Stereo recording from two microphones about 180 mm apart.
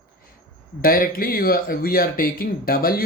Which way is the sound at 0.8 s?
55° left (ahead or behind).